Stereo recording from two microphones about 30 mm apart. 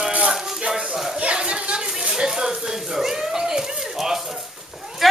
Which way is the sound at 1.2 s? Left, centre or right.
Right.